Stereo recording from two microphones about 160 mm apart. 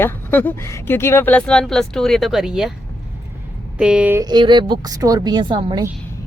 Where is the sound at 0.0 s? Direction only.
10° left (ahead or behind).